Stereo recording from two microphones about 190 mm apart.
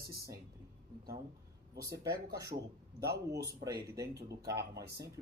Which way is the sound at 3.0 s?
60° right (ahead or behind).